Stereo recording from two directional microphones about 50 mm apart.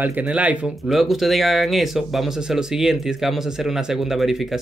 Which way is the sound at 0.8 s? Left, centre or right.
Centre.